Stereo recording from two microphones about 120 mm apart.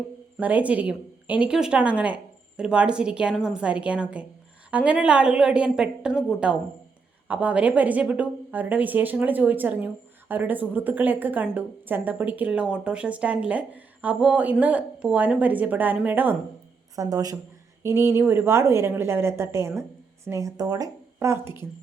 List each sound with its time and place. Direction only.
0.3 s speech: 15° right (ahead or behind)
16.9 s a woman's voice: 30° right (ahead or behind)